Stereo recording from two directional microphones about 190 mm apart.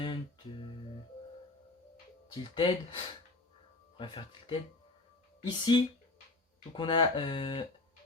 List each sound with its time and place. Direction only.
2.3 s speech: 25° left (ahead or behind)